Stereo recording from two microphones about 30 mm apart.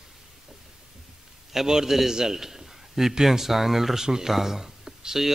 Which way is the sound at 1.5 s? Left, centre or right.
Centre.